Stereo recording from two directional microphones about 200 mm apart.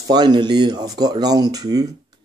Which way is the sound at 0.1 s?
20° right (ahead or behind).